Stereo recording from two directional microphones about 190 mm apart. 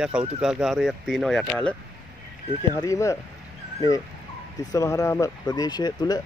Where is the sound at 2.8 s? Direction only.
15° left (ahead or behind).